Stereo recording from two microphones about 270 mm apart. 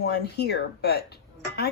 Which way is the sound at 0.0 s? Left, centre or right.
Left.